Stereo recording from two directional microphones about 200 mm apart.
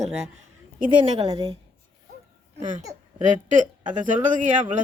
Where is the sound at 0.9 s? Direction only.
25° right (ahead or behind).